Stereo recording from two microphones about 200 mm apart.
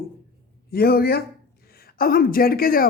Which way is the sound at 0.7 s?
50° left (ahead or behind).